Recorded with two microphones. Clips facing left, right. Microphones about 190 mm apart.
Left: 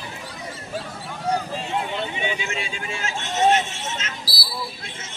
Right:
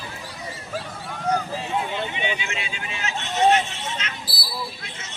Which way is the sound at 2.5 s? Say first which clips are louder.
Left 3 dB; 40° left (ahead or behind).